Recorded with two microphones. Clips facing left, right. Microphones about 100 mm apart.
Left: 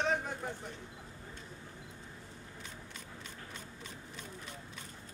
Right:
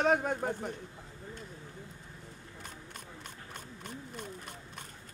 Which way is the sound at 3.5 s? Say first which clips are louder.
Right 3 dB; 55° right (ahead or behind).